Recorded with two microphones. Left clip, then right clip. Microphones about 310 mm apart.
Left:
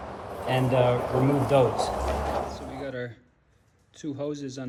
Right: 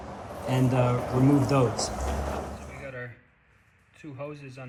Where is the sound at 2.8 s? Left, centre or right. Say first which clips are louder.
Left 4 dB; right.